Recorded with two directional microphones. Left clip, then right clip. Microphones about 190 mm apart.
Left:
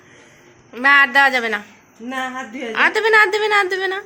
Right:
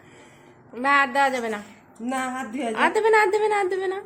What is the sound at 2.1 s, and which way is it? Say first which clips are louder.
Speech: left 2 dB; 55° right (ahead or behind).